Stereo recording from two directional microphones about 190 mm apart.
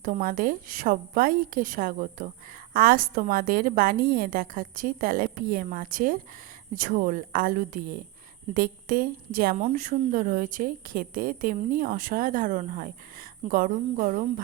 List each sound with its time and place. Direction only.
0.0 s a woman's voice: 45° right (ahead or behind)